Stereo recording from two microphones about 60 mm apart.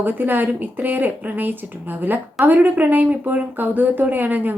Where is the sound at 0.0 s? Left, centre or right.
Right.